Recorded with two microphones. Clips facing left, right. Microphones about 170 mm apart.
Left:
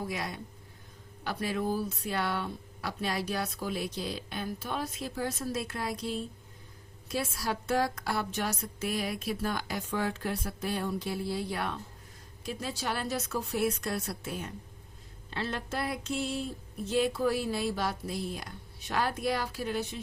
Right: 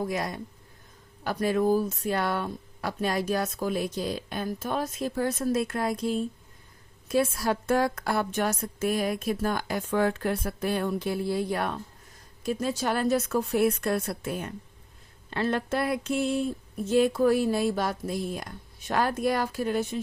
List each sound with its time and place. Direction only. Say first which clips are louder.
0.0 s speech: right 6 dB; 45° right (ahead or behind)